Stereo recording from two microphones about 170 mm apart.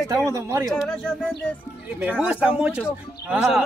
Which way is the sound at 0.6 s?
5° left (ahead or behind).